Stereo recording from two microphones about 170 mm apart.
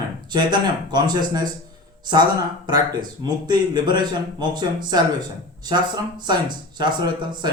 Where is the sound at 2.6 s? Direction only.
25° right (ahead or behind).